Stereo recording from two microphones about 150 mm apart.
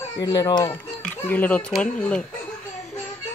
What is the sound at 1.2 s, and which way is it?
A child's voice, 10° left (ahead or behind).